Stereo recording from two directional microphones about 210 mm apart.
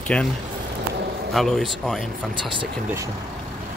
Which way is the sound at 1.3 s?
Centre (ahead or behind).